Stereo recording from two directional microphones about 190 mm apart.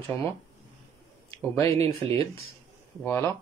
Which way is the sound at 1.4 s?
15° left (ahead or behind).